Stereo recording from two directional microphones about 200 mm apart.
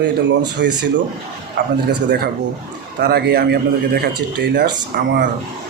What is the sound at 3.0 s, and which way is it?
A man's voice, 50° right (ahead or behind).